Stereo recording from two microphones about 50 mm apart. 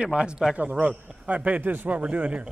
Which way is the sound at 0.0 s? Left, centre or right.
Centre.